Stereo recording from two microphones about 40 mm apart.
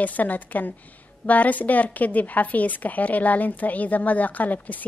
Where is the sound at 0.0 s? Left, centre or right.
Left.